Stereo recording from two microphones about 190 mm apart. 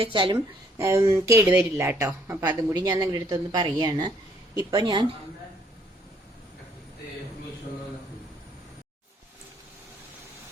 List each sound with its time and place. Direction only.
0.0 s a woman's voice: 25° right (ahead or behind)
0.3 s a woman's voice: 15° right (ahead or behind)